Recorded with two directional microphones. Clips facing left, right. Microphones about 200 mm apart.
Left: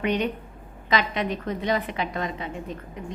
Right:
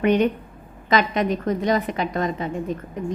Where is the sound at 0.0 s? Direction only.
50° right (ahead or behind).